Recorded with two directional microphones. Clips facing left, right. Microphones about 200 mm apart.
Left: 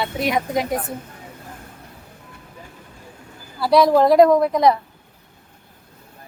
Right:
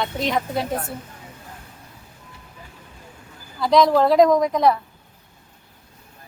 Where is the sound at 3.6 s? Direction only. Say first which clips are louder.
Left 2 dB; 10° left (ahead or behind).